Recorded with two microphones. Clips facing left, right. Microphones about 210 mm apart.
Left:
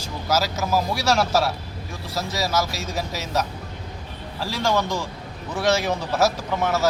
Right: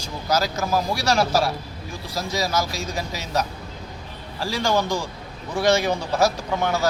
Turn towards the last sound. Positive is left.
turn(degrees=5)  # may be behind; listen again after turning